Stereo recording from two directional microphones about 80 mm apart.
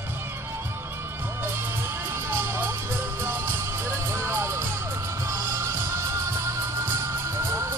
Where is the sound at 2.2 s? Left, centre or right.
Right.